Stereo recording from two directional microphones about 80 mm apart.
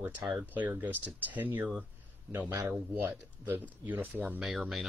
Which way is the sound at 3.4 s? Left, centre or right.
Right.